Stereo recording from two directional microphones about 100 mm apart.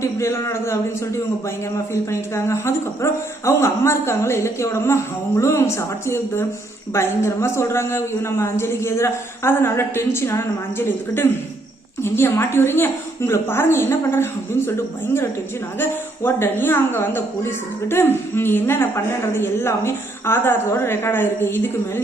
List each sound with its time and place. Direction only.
0.0 s a woman's voice: 30° left (ahead or behind)
1.9 s a woman's voice: 25° left (ahead or behind)